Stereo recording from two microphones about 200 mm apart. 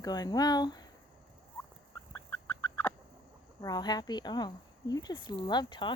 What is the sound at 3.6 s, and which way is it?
Speech, 20° left (ahead or behind).